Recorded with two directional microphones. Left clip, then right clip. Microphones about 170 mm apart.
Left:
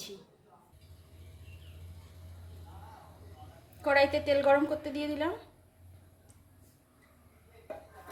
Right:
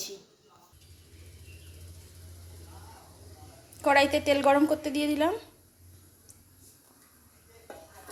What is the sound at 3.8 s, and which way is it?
A woman's voice, 45° right (ahead or behind).